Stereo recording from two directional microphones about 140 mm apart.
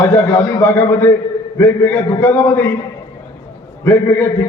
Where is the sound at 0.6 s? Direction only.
15° left (ahead or behind).